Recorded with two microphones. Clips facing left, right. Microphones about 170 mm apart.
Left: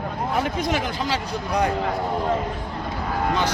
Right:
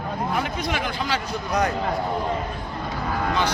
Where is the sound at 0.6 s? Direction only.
45° left (ahead or behind).